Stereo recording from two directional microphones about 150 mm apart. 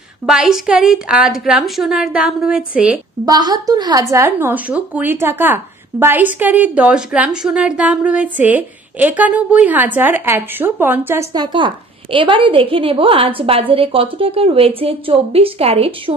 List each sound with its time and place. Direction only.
0.3 s a woman's voice: 5° right (ahead or behind)
3.3 s a woman's voice: 25° right (ahead or behind)
11.3 s a woman's voice: 30° right (ahead or behind)